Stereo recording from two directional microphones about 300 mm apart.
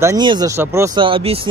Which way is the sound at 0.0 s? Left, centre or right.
Centre.